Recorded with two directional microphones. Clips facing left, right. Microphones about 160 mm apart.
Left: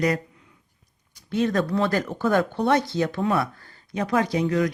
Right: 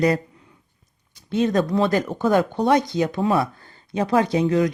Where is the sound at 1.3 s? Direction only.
20° right (ahead or behind).